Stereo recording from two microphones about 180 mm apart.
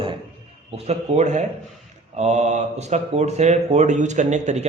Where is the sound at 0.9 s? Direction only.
40° right (ahead or behind).